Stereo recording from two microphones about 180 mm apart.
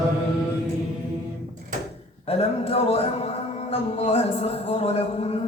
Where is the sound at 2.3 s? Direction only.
35° left (ahead or behind).